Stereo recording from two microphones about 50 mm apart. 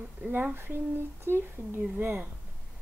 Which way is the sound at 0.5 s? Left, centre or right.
Right.